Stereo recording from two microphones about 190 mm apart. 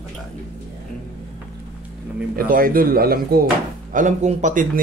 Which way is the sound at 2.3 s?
50° right (ahead or behind).